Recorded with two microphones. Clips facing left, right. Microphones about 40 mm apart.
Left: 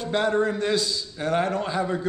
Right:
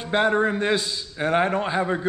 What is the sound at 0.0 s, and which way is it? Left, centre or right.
A man's voice, right.